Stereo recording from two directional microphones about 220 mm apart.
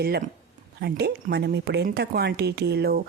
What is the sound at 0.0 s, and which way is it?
A woman's voice, 45° right (ahead or behind).